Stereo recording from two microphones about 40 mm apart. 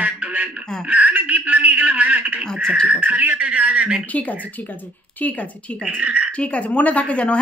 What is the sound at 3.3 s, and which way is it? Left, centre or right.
Speech, right.